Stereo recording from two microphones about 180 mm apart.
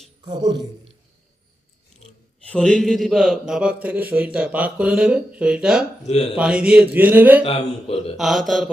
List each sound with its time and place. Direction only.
0.3 s a man's voice: 25° right (ahead or behind)
2.5 s speech: 5° left (ahead or behind)
6.0 s speech: 35° left (ahead or behind)
6.3 s speech: 5° right (ahead or behind)
7.4 s speech: 35° left (ahead or behind)
8.1 s speech: centre (ahead or behind)